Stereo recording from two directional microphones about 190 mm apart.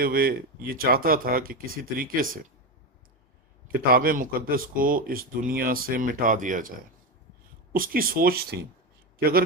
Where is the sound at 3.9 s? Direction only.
50° right (ahead or behind).